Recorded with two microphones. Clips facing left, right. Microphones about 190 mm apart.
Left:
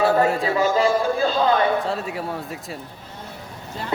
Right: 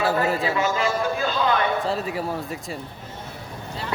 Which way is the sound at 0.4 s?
35° left (ahead or behind).